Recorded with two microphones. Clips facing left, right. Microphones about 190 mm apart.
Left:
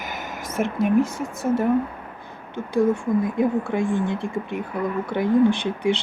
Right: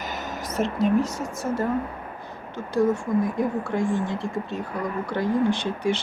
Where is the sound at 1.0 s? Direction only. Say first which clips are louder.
Left 1 dB; 55° left (ahead or behind).